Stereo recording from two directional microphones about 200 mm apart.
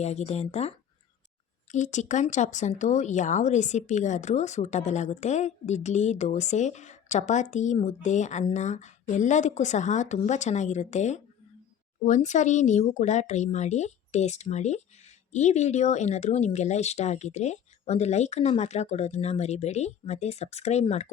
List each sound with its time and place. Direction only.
0.0 s speech: 35° left (ahead or behind)
1.7 s speech: 35° left (ahead or behind)